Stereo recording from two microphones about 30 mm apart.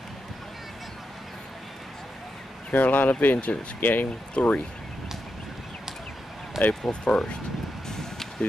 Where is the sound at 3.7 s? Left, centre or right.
Left.